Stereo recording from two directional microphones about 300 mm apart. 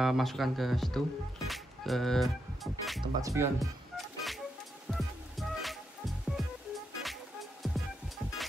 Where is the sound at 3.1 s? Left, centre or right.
Centre.